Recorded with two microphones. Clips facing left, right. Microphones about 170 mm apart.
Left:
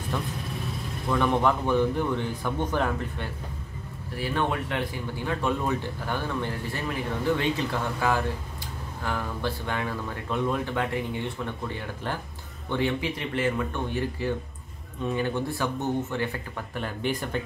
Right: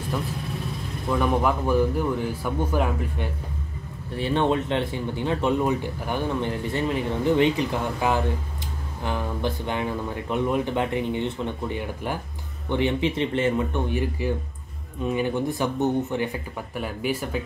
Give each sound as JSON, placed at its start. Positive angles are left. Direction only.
{"t": 0.1, "sound": "speech", "side_deg": -5}
{"t": 4.2, "sound": "speech", "side_deg": -25}